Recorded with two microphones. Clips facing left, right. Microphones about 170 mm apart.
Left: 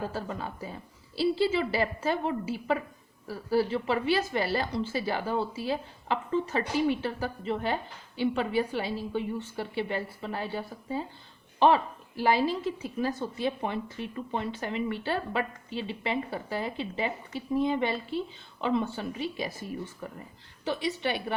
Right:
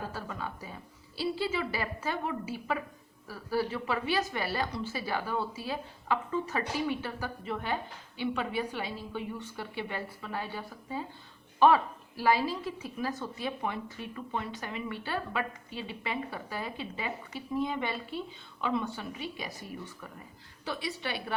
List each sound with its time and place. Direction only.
0.1 s a woman's voice: 30° left (ahead or behind)
20.7 s a woman's voice: 20° left (ahead or behind)